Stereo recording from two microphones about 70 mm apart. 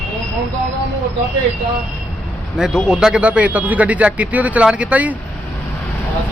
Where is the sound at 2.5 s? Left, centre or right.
Centre.